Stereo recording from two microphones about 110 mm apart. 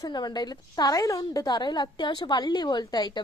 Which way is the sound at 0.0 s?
40° left (ahead or behind).